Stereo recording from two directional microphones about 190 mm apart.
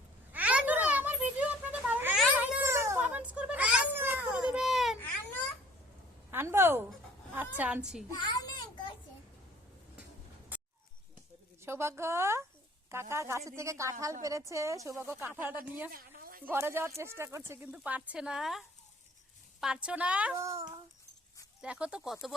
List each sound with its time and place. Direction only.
0.3 s a sound: 10° right (ahead or behind)
4.9 s baby cry: 10° left (ahead or behind)
6.3 s a sound: 10° right (ahead or behind)
7.5 s a woman's voice: 10° right (ahead or behind)
8.4 s child singing: 20° left (ahead or behind)
11.6 s a woman's voice: 15° right (ahead or behind)
15.9 s a sound: 50° right (ahead or behind)
16.4 s a woman's voice: 10° right (ahead or behind)
21.6 s speech: 5° right (ahead or behind)